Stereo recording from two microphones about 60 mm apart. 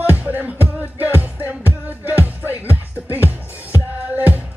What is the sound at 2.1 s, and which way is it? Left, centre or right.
Music, left.